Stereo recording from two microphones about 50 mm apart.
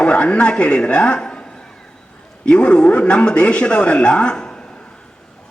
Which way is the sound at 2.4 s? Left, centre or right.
Centre.